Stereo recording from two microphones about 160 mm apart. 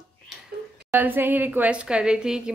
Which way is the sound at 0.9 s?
10° right (ahead or behind).